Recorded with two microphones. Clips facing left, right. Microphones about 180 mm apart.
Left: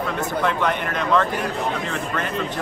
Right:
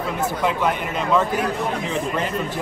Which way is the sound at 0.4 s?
10° right (ahead or behind).